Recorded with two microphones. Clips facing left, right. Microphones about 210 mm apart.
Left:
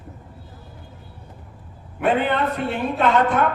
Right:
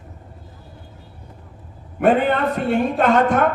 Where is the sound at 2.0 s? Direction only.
45° right (ahead or behind).